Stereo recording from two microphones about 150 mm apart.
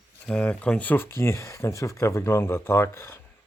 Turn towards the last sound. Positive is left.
turn(degrees=15)  # may be behind; listen again after turning